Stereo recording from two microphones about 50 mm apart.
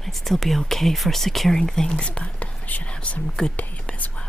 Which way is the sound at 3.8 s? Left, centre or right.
Left.